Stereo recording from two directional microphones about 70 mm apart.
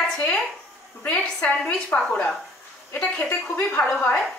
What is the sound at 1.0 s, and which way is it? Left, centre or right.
Speech, left.